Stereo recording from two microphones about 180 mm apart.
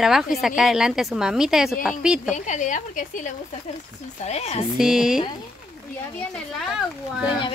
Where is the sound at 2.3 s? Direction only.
45° left (ahead or behind).